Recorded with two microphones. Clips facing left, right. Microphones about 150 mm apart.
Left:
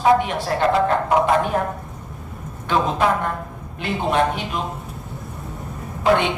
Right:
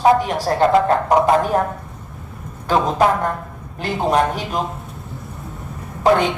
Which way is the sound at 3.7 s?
40° right (ahead or behind).